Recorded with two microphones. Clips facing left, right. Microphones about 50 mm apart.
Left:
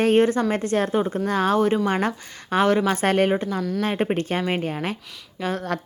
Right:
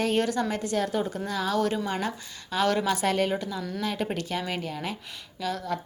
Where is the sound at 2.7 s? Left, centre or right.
Left.